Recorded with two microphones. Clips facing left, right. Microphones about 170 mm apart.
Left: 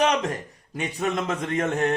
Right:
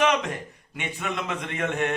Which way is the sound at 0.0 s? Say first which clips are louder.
Left 1 dB; 40° left (ahead or behind).